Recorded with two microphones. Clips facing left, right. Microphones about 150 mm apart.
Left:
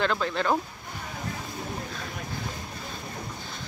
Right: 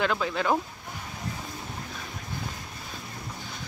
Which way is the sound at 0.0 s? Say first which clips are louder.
Even; 5° right (ahead or behind).